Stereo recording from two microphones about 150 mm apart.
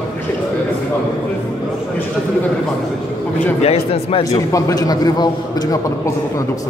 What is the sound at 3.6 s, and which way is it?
Speech, 40° left (ahead or behind).